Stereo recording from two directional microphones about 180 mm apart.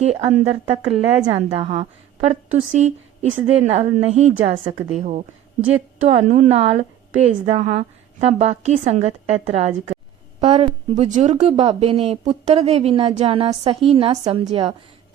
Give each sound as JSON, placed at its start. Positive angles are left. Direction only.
{"t": 0.0, "sound": "a woman's voice", "side_deg": -35}